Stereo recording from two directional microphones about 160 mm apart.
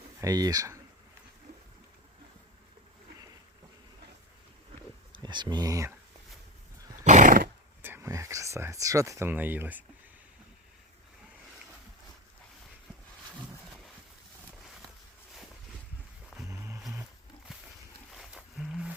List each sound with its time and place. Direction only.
0.2 s speech: 20° right (ahead or behind)
5.1 s speech: 30° right (ahead or behind)
7.0 s neigh: 50° right (ahead or behind)
7.8 s speech: 15° right (ahead or behind)
16.5 s a sound: 15° right (ahead or behind)
18.1 s wild animals: centre (ahead or behind)